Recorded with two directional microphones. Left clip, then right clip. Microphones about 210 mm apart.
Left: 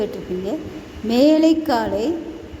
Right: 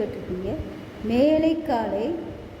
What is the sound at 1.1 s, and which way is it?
A woman's voice, 25° left (ahead or behind).